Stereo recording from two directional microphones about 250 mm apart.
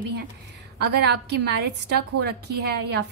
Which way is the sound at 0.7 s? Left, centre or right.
Right.